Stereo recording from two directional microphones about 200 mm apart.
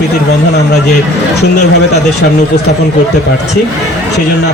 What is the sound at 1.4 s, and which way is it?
Speech, 55° left (ahead or behind).